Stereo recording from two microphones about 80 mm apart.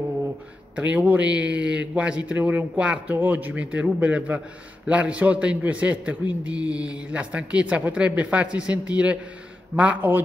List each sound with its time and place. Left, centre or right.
0.7 s a man's voice: centre